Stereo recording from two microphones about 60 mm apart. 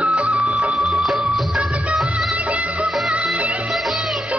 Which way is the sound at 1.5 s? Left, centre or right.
Centre.